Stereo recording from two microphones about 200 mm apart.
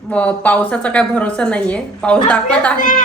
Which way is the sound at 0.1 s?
5° left (ahead or behind).